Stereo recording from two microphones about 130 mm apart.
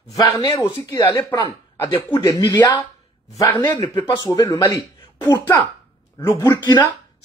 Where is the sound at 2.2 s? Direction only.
35° left (ahead or behind).